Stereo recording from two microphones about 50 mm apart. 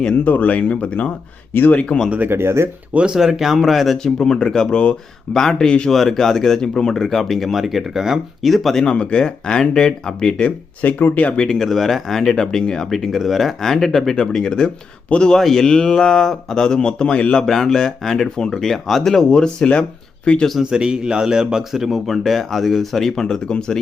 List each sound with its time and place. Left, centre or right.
0.3 s speech: left
2.0 s speech: right
2.3 s speech: right
2.9 s speech: right
3.2 s a man's voice: centre
4.0 s a man's voice: centre
8.5 s a man's voice: centre
8.8 s speech: centre
10.8 s speech: left
11.3 s speech: centre
11.6 s a man's voice: centre; by 20.5 s left
20.6 s a man's voice: centre